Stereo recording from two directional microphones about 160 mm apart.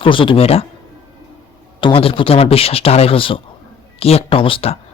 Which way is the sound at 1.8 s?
35° left (ahead or behind).